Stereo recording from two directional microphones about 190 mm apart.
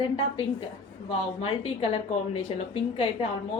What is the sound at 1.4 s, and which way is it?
A woman's voice, 30° left (ahead or behind).